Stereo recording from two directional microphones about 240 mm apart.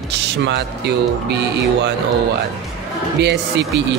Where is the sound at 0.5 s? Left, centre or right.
Right.